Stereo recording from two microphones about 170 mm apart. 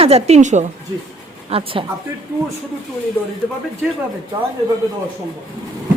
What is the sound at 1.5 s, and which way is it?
Speech, 30° right (ahead or behind).